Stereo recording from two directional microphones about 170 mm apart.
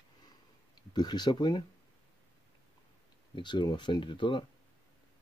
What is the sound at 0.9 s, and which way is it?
Speech, 25° left (ahead or behind).